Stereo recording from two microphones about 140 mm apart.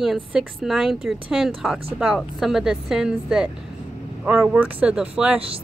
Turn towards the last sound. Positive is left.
turn(degrees=-10)  # may be behind; listen again after turning